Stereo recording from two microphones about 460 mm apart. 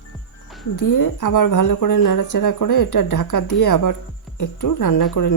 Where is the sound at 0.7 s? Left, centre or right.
Left.